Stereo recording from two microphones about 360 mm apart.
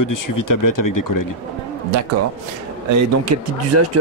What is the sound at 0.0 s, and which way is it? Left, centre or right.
Speech, left.